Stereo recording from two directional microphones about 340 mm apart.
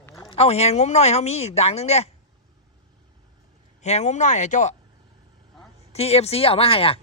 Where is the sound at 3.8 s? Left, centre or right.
Centre.